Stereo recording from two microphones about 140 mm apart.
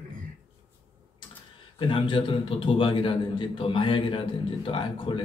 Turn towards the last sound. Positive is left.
turn(degrees=35)  # may be behind; listen again after turning